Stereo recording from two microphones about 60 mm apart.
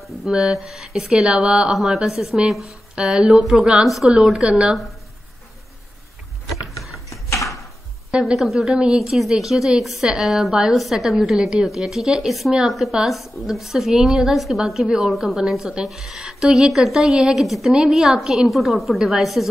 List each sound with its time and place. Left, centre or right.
0.0 s speech: centre
3.8 s a woman's voice: centre
4.1 s speech: centre
6.5 s a sound: left
8.1 s a woman's voice: centre
8.4 s a woman's voice: centre